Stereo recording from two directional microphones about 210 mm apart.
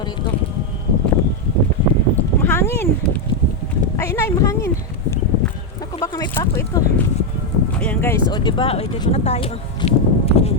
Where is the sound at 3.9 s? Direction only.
10° left (ahead or behind).